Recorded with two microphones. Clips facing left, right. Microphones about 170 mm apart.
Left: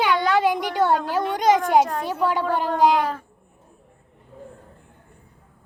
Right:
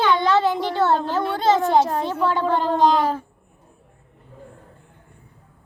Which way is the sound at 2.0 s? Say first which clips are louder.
Right 1 dB; 10° left (ahead or behind).